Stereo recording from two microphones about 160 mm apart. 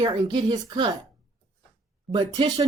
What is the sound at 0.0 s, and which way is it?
Speech, 25° right (ahead or behind).